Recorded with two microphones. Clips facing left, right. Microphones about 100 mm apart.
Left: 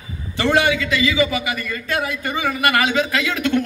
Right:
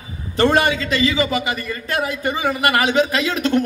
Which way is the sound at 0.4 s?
35° right (ahead or behind).